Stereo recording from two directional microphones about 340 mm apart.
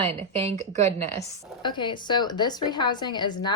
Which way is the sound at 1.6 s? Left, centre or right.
Centre.